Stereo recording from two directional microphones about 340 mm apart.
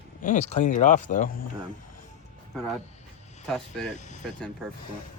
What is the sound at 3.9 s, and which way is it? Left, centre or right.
Speech, left.